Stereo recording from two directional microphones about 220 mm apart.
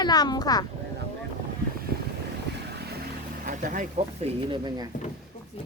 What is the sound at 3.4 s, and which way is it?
Vehicle, 35° right (ahead or behind).